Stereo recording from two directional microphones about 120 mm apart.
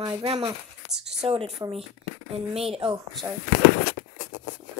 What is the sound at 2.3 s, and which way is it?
Speech, 55° right (ahead or behind).